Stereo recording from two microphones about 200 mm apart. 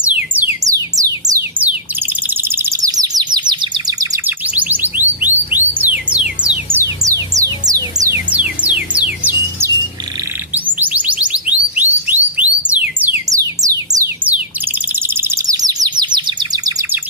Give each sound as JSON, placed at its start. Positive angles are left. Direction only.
{"t": 0.0, "sound": "music", "side_deg": -10}
{"t": 2.0, "sound": "chirp", "side_deg": -10}
{"t": 7.8, "sound": "music", "side_deg": -20}
{"t": 8.3, "sound": "music", "side_deg": -5}
{"t": 14.3, "sound": "bird", "side_deg": -5}